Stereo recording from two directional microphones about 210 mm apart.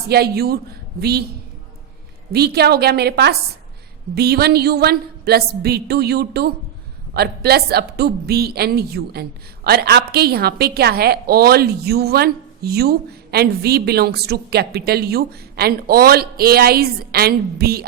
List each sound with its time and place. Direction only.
0.1 s a woman's voice: 50° right (ahead or behind)
2.3 s a woman's voice: 50° right (ahead or behind)